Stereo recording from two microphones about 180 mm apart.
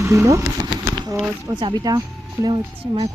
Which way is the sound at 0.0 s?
15° right (ahead or behind).